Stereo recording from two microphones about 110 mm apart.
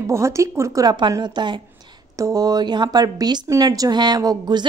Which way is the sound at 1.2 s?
45° right (ahead or behind).